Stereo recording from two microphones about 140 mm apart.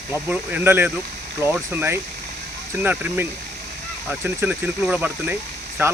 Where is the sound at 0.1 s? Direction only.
15° right (ahead or behind).